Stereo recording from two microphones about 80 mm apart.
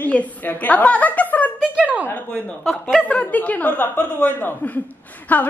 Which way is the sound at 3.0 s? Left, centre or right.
Centre.